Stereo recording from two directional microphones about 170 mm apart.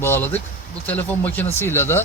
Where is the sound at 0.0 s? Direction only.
15° left (ahead or behind).